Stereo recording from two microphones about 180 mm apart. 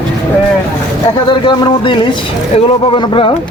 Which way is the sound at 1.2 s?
25° left (ahead or behind).